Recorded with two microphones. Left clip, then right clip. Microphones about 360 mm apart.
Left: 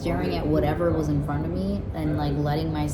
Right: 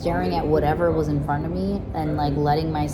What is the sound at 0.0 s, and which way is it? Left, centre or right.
A woman's voice, centre.